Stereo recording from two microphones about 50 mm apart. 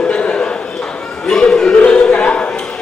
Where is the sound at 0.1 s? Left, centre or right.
Left.